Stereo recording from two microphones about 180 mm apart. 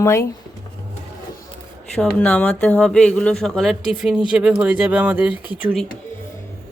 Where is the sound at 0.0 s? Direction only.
15° left (ahead or behind).